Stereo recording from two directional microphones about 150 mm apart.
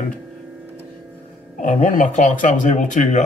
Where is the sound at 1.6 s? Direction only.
60° left (ahead or behind).